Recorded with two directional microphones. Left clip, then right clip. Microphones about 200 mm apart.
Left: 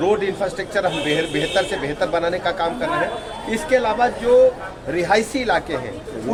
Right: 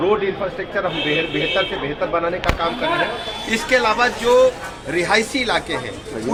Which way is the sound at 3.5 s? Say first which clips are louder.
Right 2 dB; centre (ahead or behind).